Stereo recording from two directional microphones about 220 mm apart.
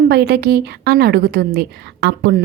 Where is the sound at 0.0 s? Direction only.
45° right (ahead or behind).